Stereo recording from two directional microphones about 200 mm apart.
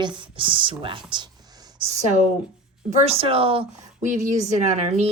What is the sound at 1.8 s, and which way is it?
A woman's voice, 35° right (ahead or behind).